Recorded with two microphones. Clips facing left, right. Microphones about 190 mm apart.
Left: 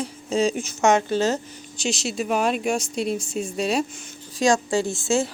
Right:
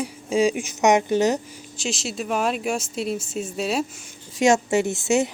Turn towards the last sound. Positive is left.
turn(degrees=-20)  # may be behind; listen again after turning